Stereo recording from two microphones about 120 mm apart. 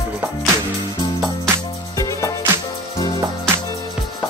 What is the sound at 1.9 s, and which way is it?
Music, 25° left (ahead or behind).